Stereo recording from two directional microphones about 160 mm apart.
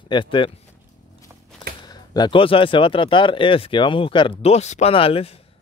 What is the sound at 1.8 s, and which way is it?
Speech, 25° left (ahead or behind).